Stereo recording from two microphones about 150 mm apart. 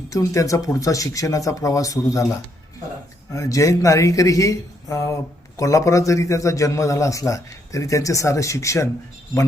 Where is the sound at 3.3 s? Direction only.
20° left (ahead or behind).